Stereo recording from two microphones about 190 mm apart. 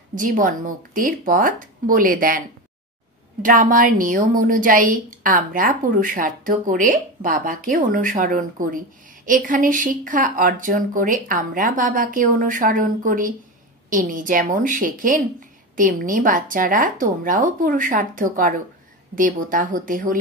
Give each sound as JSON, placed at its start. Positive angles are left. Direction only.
{"t": 0.1, "sound": "a woman's voice", "side_deg": -45}
{"t": 3.4, "sound": "a woman's voice", "side_deg": -45}